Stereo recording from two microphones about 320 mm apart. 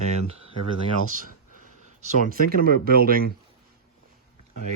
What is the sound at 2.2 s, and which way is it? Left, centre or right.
Speech, right.